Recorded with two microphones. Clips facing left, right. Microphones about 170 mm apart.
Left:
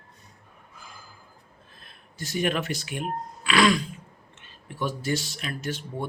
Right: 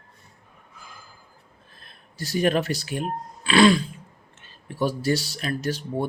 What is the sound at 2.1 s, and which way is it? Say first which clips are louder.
Speech: right 5 dB; 35° right (ahead or behind).